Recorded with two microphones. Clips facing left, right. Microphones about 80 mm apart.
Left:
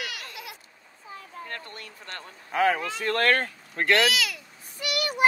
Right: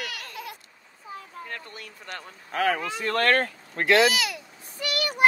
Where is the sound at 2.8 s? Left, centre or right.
Centre.